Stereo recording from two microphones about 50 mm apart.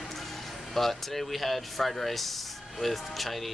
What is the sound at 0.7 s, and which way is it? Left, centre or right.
Speech, centre.